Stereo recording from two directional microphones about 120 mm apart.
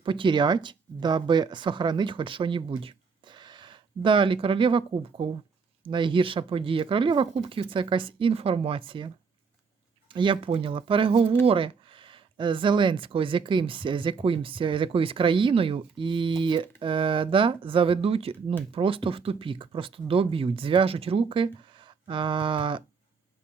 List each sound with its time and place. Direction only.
0.0 s speech: 40° right (ahead or behind)